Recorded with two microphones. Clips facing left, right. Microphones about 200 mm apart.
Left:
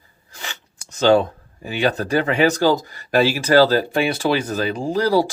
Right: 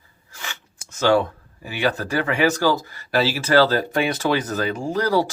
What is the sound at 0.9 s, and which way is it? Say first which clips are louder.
Speech: left 3 dB; 20° left (ahead or behind).